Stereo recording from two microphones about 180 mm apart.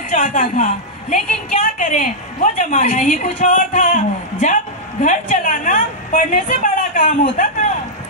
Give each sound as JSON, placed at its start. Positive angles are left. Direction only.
{"t": 0.1, "sound": "a woman's voice", "side_deg": 45}